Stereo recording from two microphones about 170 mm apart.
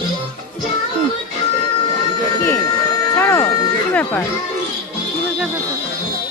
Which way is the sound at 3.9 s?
10° left (ahead or behind).